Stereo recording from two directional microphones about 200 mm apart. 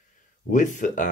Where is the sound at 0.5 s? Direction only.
40° left (ahead or behind).